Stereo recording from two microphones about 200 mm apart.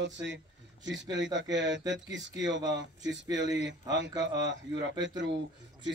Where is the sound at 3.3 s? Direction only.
65° right (ahead or behind).